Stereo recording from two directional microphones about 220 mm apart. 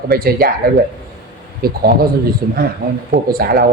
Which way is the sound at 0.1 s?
45° right (ahead or behind).